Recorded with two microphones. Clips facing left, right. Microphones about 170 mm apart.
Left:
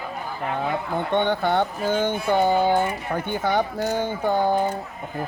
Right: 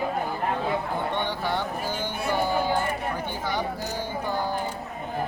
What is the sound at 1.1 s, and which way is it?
Speech, 55° left (ahead or behind).